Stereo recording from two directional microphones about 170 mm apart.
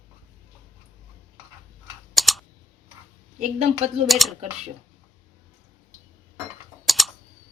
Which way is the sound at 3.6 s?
40° right (ahead or behind).